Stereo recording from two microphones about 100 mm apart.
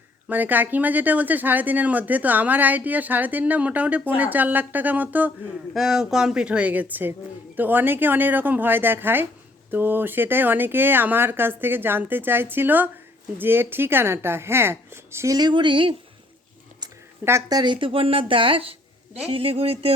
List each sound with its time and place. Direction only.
0.3 s speech: 15° right (ahead or behind)
5.7 s speech: 5° right (ahead or behind); by 15.4 s 25° right (ahead or behind)
15.4 s speech: 50° right (ahead or behind)
17.5 s speech: 50° right (ahead or behind); by 19.9 s 75° right (ahead or behind)